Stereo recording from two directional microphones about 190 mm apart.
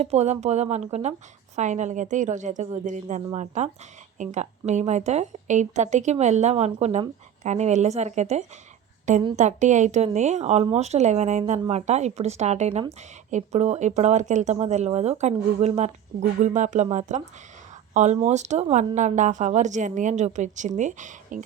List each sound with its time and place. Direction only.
0.0 s a woman's voice: 35° right (ahead or behind)